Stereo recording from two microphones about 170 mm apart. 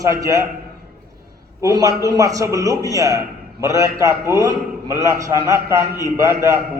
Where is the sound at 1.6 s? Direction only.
20° right (ahead or behind).